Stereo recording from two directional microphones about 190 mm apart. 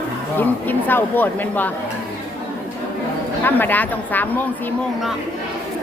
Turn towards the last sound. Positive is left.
turn(degrees=10)  # may be behind; listen again after turning